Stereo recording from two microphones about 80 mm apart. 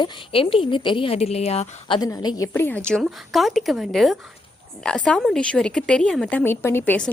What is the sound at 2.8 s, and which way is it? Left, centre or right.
Speech, centre.